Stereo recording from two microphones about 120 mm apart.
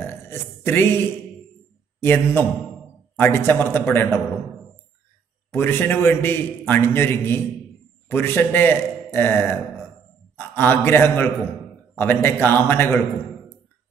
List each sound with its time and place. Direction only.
0.0 s burping: 20° left (ahead or behind)
2.0 s a man's voice: 15° left (ahead or behind)
5.5 s a man's voice: 15° left (ahead or behind)